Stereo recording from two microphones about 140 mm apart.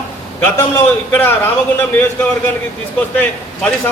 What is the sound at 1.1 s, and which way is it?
Speech, 15° left (ahead or behind).